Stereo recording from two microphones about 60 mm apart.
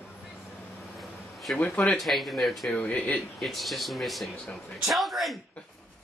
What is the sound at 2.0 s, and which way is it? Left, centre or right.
Speech, centre.